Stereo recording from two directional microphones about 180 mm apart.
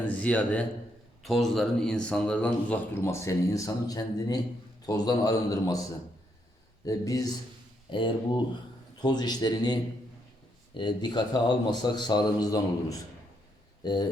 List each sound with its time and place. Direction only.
0.1 s a man's voice: 10° left (ahead or behind)
6.8 s a man's voice: 20° left (ahead or behind)
10.8 s a man's voice: 25° left (ahead or behind)